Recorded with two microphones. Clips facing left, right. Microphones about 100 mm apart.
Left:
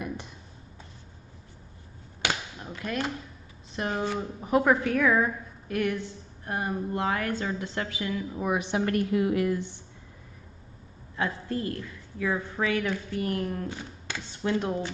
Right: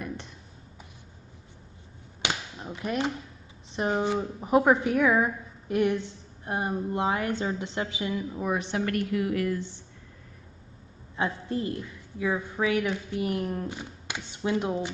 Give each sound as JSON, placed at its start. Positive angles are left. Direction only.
{"t": 2.2, "sound": "a sound", "side_deg": -20}
{"t": 3.7, "sound": "speech", "side_deg": -20}
{"t": 8.5, "sound": "a woman's voice", "side_deg": 15}
{"t": 11.1, "sound": "a woman's voice", "side_deg": -20}